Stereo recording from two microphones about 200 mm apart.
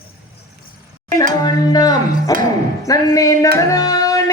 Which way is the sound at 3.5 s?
15° left (ahead or behind).